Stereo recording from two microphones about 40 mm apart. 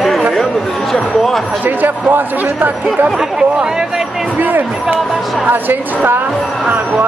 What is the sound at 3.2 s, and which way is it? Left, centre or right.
Speech, centre.